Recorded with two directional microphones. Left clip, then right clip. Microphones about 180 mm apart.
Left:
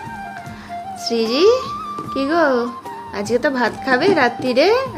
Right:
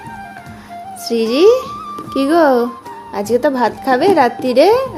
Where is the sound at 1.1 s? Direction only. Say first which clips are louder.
Right 4 dB; 25° right (ahead or behind).